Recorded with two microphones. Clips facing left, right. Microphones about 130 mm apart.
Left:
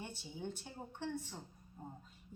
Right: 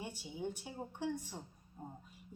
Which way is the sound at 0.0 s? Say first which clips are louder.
Right 3 dB; 10° right (ahead or behind).